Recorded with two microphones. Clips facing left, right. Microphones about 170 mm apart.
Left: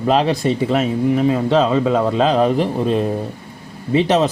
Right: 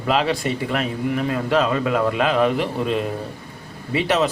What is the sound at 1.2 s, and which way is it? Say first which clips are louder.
A man's voice: left 2 dB; 20° left (ahead or behind).